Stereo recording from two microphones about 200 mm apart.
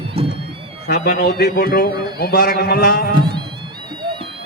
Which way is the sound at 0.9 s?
50° left (ahead or behind).